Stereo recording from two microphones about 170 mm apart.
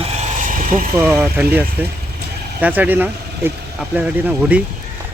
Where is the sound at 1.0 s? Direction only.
15° right (ahead or behind).